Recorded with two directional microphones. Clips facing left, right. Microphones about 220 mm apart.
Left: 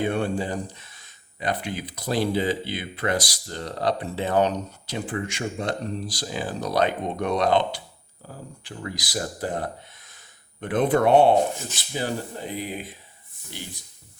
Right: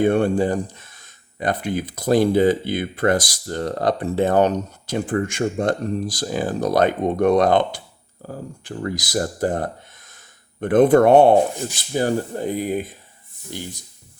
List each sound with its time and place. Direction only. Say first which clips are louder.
0.0 s speech: right 8 dB; 50° right (ahead or behind)